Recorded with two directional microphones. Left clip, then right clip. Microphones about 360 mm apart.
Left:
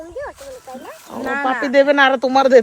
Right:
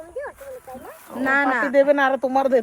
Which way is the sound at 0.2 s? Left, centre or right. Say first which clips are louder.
Left 2 dB; centre.